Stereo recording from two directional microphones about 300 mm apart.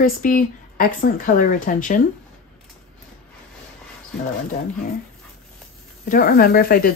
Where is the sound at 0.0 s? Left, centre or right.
Left.